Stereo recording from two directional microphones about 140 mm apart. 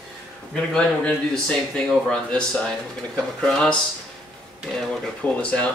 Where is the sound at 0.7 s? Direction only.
5° left (ahead or behind).